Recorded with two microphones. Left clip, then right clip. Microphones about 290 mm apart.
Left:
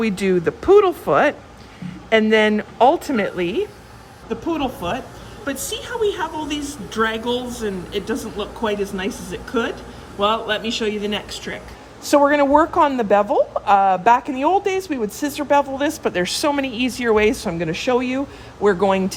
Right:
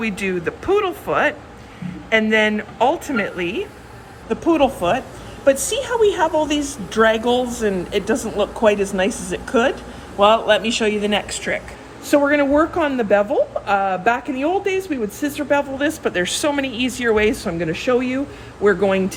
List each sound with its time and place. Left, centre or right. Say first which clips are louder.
0.0 s speech: left 3 dB; left
4.3 s speech: right 7 dB; centre